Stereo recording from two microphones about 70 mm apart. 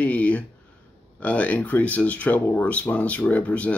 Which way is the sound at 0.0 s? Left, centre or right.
Left.